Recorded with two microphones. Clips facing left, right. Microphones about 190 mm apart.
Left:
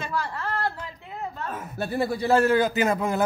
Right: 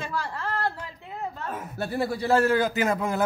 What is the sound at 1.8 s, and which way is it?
Speech, 20° left (ahead or behind).